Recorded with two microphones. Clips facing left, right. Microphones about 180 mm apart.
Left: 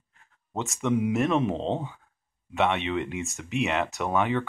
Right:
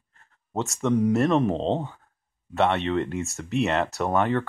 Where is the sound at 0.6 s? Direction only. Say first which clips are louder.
Right 3 dB; centre (ahead or behind).